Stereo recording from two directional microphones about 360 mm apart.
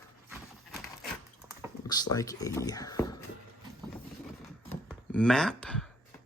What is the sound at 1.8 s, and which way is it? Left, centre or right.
Speech, centre.